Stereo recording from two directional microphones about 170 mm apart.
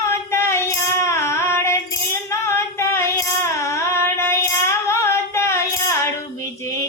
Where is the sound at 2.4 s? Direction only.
15° left (ahead or behind).